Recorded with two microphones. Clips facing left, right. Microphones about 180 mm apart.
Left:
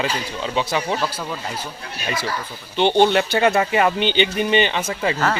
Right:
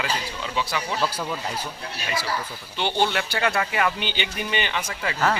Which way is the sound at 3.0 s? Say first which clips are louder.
Left 5 dB; 20° left (ahead or behind).